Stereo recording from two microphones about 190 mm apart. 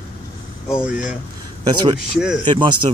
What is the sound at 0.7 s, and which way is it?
Speech, 5° right (ahead or behind).